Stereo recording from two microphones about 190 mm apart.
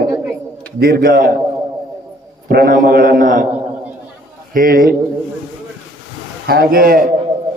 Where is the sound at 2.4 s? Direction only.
50° right (ahead or behind).